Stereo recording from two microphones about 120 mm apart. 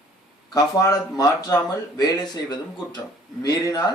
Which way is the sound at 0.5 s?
30° left (ahead or behind).